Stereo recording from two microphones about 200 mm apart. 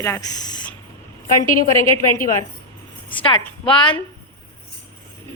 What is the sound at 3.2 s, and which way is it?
Speech, 25° left (ahead or behind).